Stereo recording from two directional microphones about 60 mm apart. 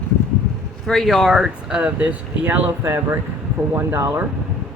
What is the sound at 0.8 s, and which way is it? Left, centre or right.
Speech, centre.